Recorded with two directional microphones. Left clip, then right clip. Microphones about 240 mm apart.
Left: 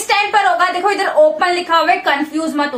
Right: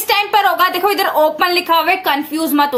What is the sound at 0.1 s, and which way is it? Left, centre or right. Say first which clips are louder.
A woman's voice: even; right.